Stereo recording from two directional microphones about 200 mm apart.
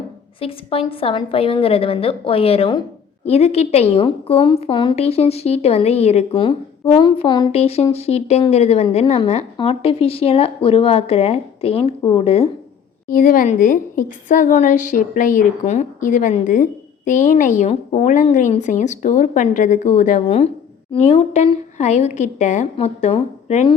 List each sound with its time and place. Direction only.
0.3 s a woman's voice: 30° left (ahead or behind)
13.1 s a woman's voice: 45° left (ahead or behind)